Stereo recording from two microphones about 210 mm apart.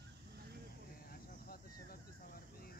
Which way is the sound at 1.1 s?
45° left (ahead or behind).